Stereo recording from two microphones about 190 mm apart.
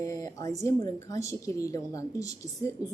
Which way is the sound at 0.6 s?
15° left (ahead or behind).